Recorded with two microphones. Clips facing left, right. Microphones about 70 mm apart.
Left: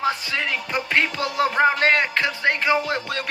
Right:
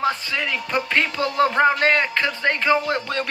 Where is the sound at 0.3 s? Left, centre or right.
Left.